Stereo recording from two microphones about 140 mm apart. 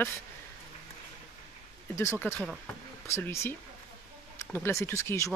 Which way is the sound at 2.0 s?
15° left (ahead or behind).